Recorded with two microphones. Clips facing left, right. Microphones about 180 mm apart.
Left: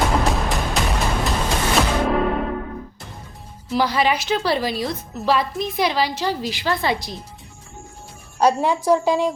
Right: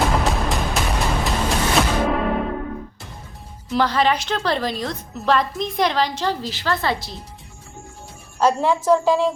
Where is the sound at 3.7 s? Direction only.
10° left (ahead or behind).